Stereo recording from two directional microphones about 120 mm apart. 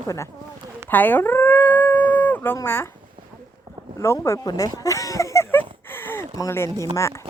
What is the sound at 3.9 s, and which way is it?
Speech, 25° left (ahead or behind).